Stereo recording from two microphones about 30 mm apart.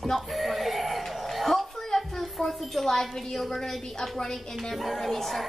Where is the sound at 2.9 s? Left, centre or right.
Centre.